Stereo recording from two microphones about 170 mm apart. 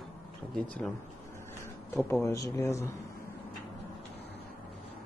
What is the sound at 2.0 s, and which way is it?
Speech, 15° left (ahead or behind).